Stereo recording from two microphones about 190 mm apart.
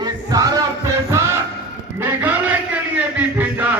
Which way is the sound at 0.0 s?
20° right (ahead or behind).